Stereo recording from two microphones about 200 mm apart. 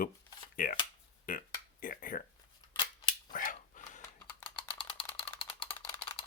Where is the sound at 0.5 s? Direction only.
45° left (ahead or behind).